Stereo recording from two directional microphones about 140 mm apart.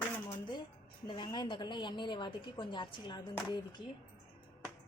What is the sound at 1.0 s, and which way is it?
A woman's voice, 35° left (ahead or behind).